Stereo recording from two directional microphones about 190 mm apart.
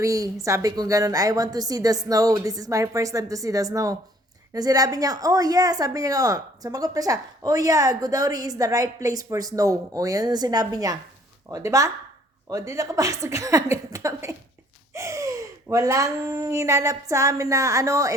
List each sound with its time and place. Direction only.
0.0 s a woman's voice: 15° right (ahead or behind)
14.9 s gasp: 15° right (ahead or behind)
15.7 s a woman's voice: 15° right (ahead or behind)